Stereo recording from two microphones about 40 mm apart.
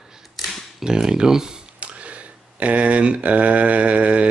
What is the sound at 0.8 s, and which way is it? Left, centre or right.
Speech, centre.